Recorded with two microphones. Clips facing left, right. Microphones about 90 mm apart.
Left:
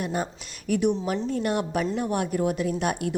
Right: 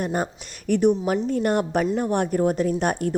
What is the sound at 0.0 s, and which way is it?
A woman's voice, 45° right (ahead or behind).